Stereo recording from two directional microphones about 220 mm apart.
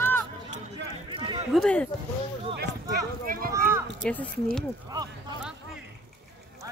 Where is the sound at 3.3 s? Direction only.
40° right (ahead or behind).